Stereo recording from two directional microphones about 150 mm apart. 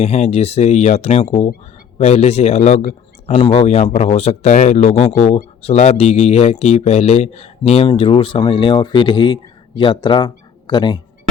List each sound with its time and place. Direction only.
0.0 s speech: 45° left (ahead or behind); by 11.0 s 30° left (ahead or behind)